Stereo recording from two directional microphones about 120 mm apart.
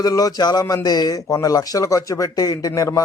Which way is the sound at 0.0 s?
30° left (ahead or behind).